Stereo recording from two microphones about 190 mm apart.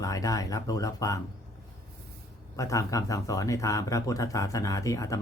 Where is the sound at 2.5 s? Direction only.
15° left (ahead or behind).